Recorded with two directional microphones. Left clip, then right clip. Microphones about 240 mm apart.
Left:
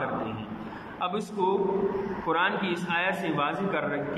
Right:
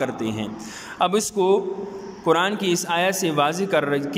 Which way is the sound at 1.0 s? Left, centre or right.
Right.